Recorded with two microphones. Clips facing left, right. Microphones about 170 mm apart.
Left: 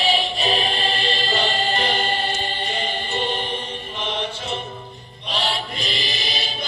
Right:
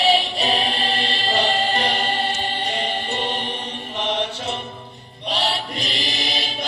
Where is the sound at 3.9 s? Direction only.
70° right (ahead or behind).